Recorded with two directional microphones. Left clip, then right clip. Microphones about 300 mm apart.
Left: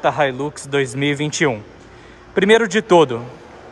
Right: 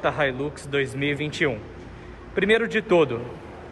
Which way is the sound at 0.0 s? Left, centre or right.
Centre.